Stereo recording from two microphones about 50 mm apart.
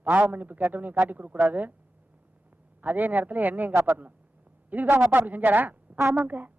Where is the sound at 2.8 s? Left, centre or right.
Right.